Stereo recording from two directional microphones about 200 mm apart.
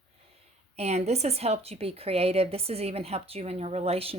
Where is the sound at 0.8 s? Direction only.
35° right (ahead or behind).